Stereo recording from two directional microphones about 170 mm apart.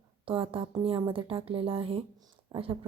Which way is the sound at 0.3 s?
30° right (ahead or behind).